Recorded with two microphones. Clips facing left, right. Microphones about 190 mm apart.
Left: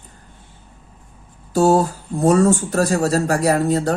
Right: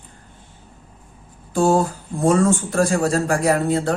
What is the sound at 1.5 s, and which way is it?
Speech, 40° left (ahead or behind).